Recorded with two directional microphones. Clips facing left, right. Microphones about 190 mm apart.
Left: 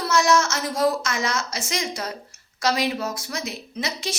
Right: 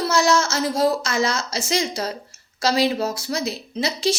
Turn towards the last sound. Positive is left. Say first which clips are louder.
# right 7 dB
turn(degrees=-30)  # may be behind; listen again after turning